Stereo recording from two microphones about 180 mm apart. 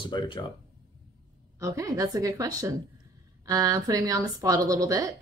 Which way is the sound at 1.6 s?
15° right (ahead or behind).